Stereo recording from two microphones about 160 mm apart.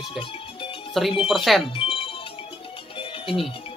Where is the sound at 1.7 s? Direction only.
35° left (ahead or behind).